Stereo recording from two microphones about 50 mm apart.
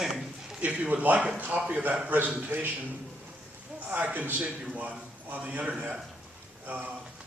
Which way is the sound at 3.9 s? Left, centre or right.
Right.